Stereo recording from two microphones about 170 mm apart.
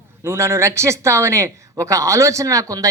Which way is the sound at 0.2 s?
15° right (ahead or behind).